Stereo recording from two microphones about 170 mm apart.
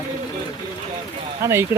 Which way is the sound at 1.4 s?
15° right (ahead or behind).